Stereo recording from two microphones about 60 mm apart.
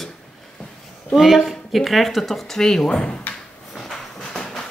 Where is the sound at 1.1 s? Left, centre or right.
Centre.